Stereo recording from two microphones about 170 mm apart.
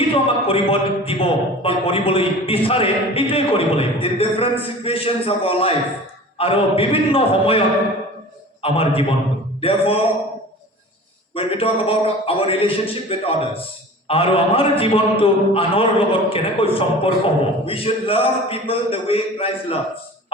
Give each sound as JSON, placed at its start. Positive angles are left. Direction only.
{"t": 0.1, "sound": "a man's voice", "side_deg": 35}
{"t": 8.6, "sound": "a man's voice", "side_deg": 35}
{"t": 11.3, "sound": "a man's voice", "side_deg": 35}